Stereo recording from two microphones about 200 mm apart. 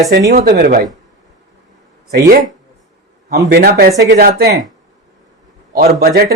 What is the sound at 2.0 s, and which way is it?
Speech, 55° right (ahead or behind).